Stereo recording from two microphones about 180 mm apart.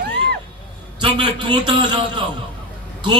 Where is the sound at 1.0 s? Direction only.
25° right (ahead or behind).